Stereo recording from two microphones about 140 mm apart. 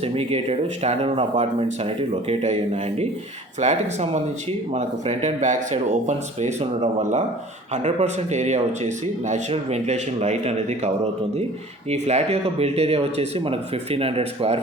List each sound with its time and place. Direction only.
0.0 s speech: 45° right (ahead or behind)
3.6 s speech: 55° right (ahead or behind)
7.7 s speech: 55° right (ahead or behind)